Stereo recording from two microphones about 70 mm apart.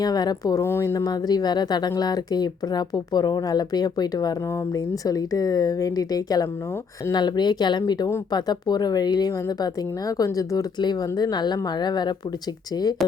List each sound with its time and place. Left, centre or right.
0.0 s speech: left
0.6 s speech: left
0.9 s speech: left
2.0 s speech: left
7.1 s speech: left
9.3 s speech: left
10.8 s speech: left
12.7 s speech: left